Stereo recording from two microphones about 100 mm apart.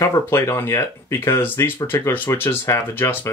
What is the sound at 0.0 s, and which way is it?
Speech, 30° left (ahead or behind).